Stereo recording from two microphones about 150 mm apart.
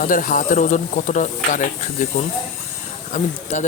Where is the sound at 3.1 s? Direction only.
55° left (ahead or behind).